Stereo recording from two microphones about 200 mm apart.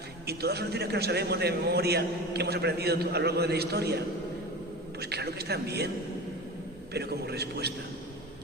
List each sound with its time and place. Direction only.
0.3 s a man's voice: 55° right (ahead or behind)
4.9 s a sound: 55° right (ahead or behind)
6.9 s a man's voice: 55° right (ahead or behind)